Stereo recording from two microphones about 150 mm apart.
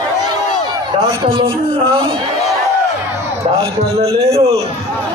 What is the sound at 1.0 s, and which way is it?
A man's voice, 35° right (ahead or behind).